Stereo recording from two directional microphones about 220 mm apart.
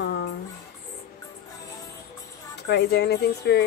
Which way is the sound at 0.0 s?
50° left (ahead or behind).